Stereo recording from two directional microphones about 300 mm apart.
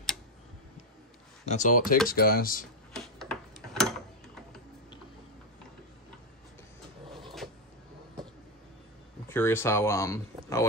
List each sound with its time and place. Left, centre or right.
1.5 s speech: left
2.9 s tick-tock: centre
9.3 s speech: centre